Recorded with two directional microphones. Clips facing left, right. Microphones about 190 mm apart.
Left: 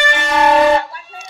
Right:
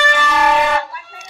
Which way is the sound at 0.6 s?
35° left (ahead or behind).